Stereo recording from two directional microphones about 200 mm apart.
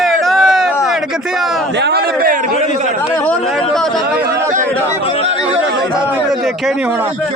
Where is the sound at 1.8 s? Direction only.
55° right (ahead or behind).